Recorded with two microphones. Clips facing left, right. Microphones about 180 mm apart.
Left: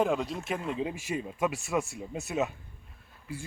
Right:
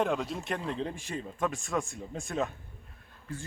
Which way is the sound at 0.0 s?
Centre (ahead or behind).